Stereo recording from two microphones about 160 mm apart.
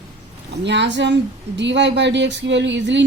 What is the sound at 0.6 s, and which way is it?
A woman's voice, 90° right.